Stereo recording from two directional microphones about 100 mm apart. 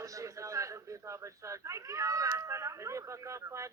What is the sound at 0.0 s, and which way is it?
A man's voice, 35° right (ahead or behind).